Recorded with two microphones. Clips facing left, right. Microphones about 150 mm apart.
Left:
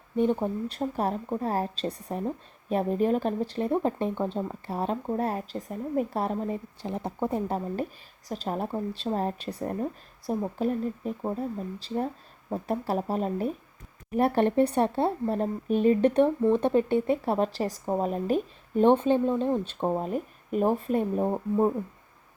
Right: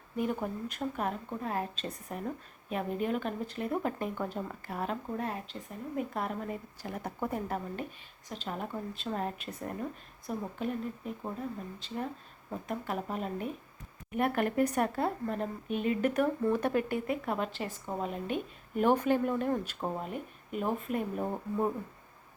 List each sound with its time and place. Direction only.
0.2 s a woman's voice: 30° left (ahead or behind)